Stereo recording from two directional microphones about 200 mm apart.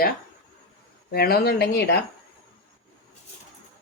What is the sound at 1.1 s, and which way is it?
Speech, 50° left (ahead or behind).